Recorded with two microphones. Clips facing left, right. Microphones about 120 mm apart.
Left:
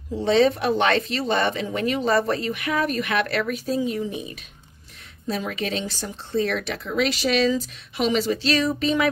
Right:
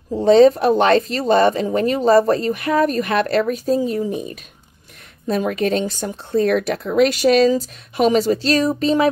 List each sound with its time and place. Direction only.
0.1 s speech: 40° right (ahead or behind)